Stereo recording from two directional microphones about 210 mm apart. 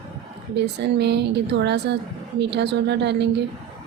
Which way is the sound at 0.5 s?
55° right (ahead or behind).